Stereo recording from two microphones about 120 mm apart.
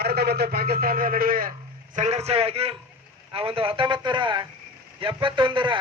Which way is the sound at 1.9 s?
70° right (ahead or behind).